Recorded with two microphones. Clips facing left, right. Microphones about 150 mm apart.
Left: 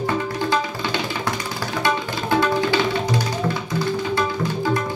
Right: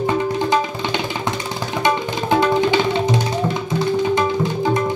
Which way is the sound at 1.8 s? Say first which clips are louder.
Right 4 dB; 20° right (ahead or behind).